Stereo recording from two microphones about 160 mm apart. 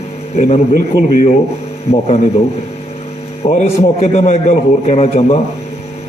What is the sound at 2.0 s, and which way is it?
Speech, 40° left (ahead or behind).